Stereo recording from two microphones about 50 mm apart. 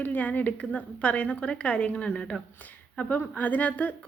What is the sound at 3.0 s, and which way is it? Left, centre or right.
Speech, left.